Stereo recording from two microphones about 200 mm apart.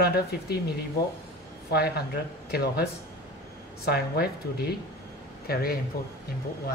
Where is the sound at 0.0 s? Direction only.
50° left (ahead or behind).